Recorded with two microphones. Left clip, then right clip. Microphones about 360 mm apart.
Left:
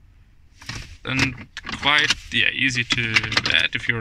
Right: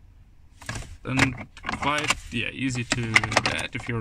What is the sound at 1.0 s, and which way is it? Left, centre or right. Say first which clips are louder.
Speech: left 1 dB; centre.